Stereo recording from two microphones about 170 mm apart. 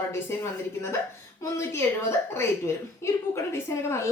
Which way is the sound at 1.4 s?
15° left (ahead or behind).